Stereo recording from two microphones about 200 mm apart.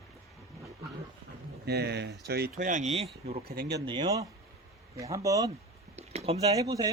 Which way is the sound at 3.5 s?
55° right (ahead or behind).